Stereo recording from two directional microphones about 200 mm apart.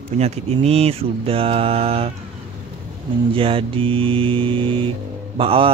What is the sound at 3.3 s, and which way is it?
Speech, 25° right (ahead or behind).